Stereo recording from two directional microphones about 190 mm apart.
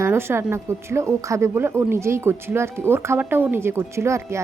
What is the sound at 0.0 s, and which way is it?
A woman's voice, 15° right (ahead or behind).